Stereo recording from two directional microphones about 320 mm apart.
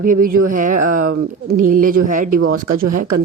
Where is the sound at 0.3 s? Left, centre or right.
Right.